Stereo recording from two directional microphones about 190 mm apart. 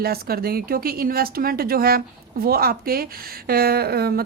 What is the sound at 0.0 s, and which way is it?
A woman's voice, 55° right (ahead or behind).